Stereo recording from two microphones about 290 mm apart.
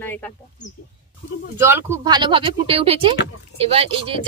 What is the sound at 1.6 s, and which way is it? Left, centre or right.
Speech, centre.